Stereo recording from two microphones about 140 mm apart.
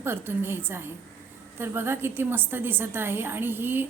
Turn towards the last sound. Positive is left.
turn(degrees=-15)  # may be behind; listen again after turning